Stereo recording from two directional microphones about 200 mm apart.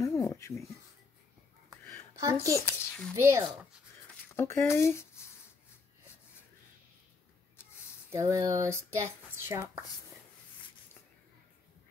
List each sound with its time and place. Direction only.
0.0 s a sound: 15° left (ahead or behind)
1.7 s a sound: 15° right (ahead or behind)
2.6 s speech: 10° left (ahead or behind)
3.2 s speech: 15° right (ahead or behind)
4.4 s speech: 15° left (ahead or behind)
8.1 s speech: 15° right (ahead or behind)